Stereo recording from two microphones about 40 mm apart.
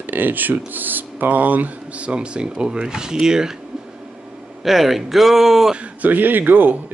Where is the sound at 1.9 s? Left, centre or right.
Right.